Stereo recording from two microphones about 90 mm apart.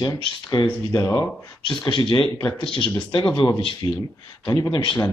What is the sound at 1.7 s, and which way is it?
Speech, 60° left (ahead or behind).